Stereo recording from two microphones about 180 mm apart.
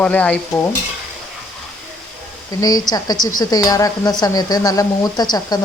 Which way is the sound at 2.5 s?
20° left (ahead or behind).